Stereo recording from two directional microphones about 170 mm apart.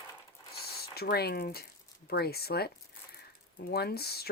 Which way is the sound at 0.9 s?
65° left (ahead or behind).